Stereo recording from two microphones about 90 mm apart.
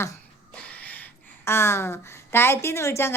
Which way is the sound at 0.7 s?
20° left (ahead or behind).